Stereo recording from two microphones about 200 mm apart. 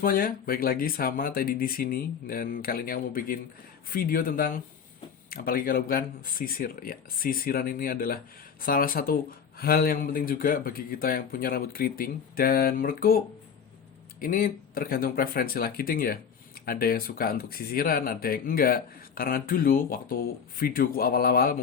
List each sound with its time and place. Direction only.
0.0 s speech: 45° left (ahead or behind)